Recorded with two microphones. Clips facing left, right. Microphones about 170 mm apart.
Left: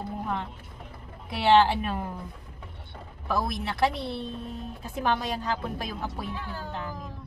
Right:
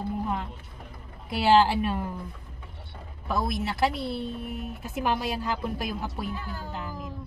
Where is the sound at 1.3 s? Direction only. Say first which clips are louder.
Even; centre (ahead or behind).